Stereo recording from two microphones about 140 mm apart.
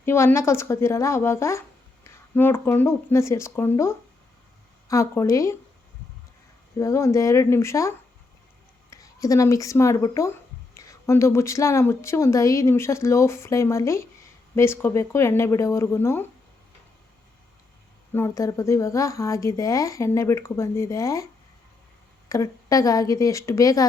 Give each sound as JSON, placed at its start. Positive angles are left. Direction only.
{"t": 0.0, "sound": "speech", "side_deg": 20}
{"t": 6.7, "sound": "speech", "side_deg": 20}
{"t": 18.1, "sound": "speech", "side_deg": 20}
{"t": 22.3, "sound": "speech", "side_deg": 25}